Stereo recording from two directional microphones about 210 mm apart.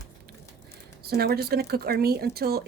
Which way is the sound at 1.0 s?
50° right (ahead or behind).